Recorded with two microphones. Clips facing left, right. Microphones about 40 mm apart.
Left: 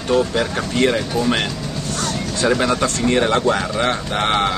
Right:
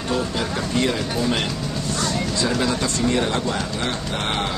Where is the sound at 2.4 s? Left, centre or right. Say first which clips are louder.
Left 7 dB; left.